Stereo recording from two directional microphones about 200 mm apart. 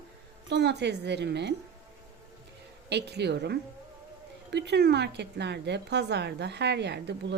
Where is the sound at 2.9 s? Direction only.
55° right (ahead or behind).